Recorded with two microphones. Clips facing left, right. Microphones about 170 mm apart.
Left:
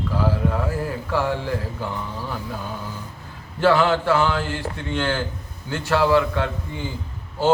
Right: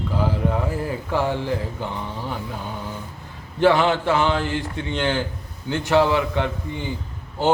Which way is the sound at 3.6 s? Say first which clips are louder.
Even; 20° right (ahead or behind).